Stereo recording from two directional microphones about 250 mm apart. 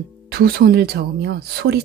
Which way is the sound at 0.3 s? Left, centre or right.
Right.